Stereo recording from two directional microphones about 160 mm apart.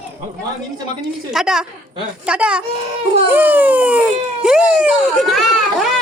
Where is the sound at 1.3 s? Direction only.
5° right (ahead or behind).